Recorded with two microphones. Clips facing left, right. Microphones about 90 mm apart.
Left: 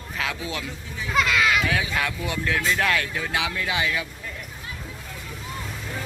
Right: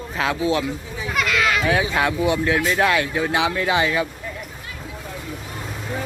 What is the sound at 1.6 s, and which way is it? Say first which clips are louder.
Speech: right 6 dB; 30° right (ahead or behind).